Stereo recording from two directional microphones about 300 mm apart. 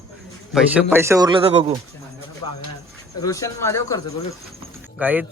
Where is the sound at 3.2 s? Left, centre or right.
Centre.